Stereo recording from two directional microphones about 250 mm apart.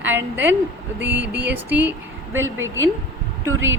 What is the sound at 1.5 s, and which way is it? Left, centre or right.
Speech, centre.